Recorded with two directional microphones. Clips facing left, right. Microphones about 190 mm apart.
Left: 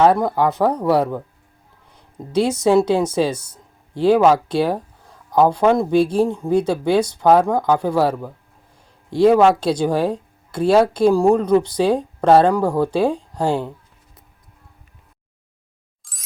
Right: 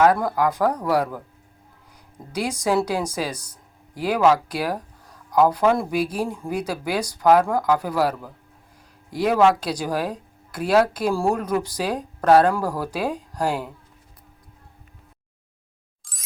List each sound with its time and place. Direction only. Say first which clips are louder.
0.0 s speech: left 3 dB; 25° left (ahead or behind)
16.0 s music: even; centre (ahead or behind)